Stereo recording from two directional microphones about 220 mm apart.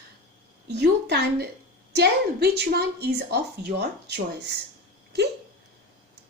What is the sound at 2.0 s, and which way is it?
A woman's voice, 45° right (ahead or behind).